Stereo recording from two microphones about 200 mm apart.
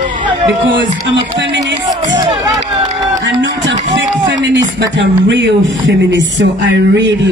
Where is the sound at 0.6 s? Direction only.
60° right (ahead or behind).